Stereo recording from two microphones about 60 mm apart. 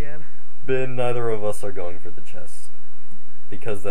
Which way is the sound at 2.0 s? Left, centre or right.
Right.